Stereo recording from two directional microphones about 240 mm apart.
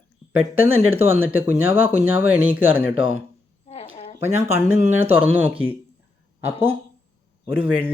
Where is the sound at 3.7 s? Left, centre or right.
Left.